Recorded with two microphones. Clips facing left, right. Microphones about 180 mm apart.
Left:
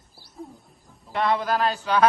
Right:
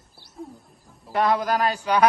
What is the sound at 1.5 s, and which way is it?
Mantra, 15° right (ahead or behind).